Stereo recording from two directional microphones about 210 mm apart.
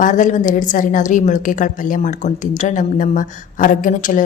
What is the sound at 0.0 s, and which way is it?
A woman's voice, 35° left (ahead or behind).